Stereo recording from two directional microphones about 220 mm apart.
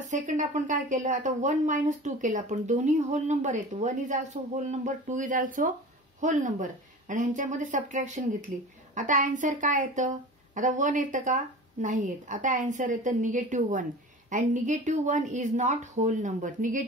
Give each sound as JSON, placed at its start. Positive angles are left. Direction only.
{"t": 0.0, "sound": "speech", "side_deg": -35}